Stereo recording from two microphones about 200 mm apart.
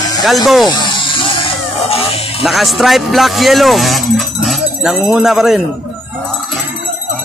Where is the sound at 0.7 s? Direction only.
20° left (ahead or behind).